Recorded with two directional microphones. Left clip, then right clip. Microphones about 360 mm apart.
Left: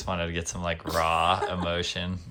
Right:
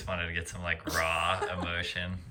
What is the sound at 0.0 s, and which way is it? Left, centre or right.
A woman's voice, centre.